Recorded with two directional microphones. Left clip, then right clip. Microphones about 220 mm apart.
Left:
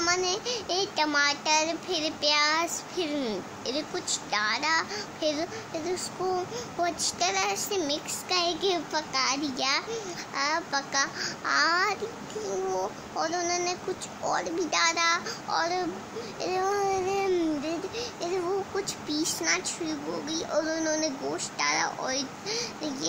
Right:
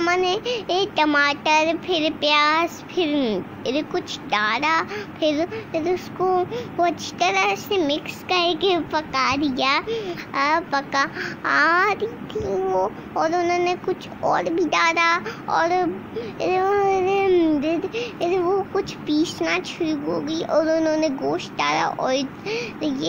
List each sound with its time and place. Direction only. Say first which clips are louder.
0.0 s a child's voice: right 7 dB; 15° right (ahead or behind)